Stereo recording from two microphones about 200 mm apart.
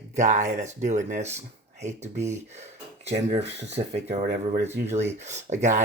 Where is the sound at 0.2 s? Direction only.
40° right (ahead or behind).